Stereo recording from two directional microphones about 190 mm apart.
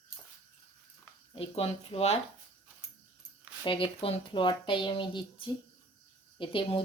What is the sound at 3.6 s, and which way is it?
Speech, 25° left (ahead or behind).